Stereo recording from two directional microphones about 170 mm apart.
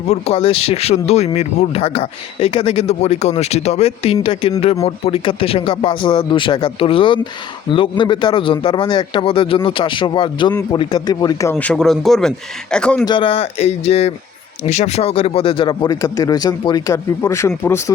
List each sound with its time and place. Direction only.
0.1 s a man's voice: 35° left (ahead or behind); by 13.1 s 5° left (ahead or behind)
13.1 s a man's voice: 30° left (ahead or behind)